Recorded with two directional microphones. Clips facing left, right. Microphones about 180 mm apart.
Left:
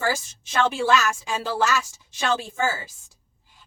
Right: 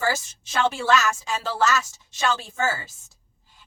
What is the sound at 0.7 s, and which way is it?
Speech, 10° left (ahead or behind).